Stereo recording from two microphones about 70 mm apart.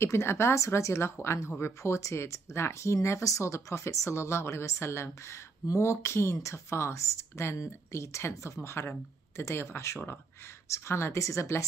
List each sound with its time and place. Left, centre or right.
0.0 s a woman's voice: left